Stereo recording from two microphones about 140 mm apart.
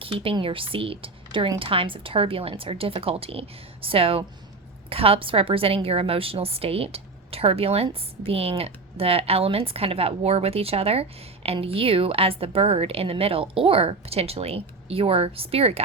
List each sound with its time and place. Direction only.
0.0 s a woman's voice: 40° right (ahead or behind)